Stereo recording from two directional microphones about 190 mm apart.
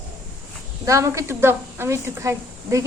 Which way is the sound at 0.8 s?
15° right (ahead or behind).